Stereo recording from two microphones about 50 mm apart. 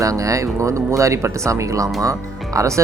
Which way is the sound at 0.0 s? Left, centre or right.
Right.